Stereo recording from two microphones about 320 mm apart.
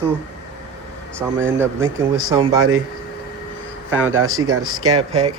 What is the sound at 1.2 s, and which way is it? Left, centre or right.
Speech, centre.